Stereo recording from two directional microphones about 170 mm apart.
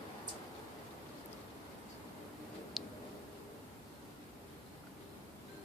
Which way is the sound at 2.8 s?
Centre (ahead or behind).